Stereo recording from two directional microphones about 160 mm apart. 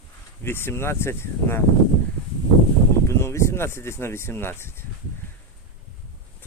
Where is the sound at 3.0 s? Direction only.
15° left (ahead or behind).